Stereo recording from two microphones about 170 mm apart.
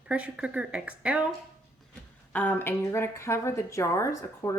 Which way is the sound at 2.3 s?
10° left (ahead or behind).